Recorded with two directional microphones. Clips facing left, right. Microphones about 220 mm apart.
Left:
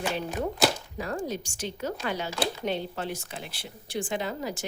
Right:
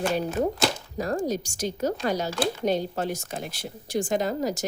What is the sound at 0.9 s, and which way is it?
A woman's voice, 40° right (ahead or behind).